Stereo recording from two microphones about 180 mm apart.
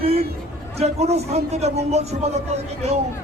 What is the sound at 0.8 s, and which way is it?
Speech, 35° right (ahead or behind).